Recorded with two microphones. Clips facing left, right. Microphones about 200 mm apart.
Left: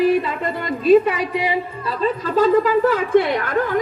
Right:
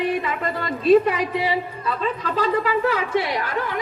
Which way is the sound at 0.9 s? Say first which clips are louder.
Left 2 dB; 5° left (ahead or behind).